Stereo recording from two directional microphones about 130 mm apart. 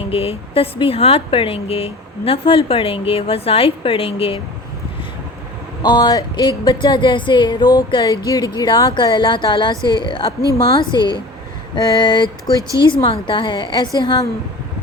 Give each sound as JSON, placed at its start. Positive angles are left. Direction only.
{"t": 0.1, "sound": "speech", "side_deg": 45}
{"t": 5.8, "sound": "speech", "side_deg": 30}
{"t": 12.5, "sound": "speech", "side_deg": -25}
{"t": 12.8, "sound": "speech", "side_deg": 40}